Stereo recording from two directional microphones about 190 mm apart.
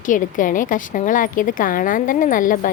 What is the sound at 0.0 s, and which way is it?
A woman's voice, 45° left (ahead or behind).